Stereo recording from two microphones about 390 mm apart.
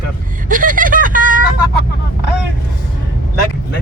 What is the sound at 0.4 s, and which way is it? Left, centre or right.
Vehicle, right.